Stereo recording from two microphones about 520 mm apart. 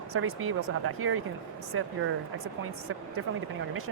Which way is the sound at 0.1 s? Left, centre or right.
Right.